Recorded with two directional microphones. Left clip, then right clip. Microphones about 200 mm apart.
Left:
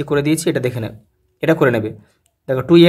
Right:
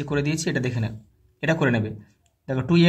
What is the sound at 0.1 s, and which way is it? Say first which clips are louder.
A man's voice: left 9 dB; 30° left (ahead or behind).